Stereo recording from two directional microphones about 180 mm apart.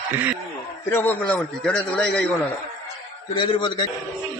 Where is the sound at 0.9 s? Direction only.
10° left (ahead or behind).